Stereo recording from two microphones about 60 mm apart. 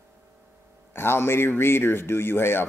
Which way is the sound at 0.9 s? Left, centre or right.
Left.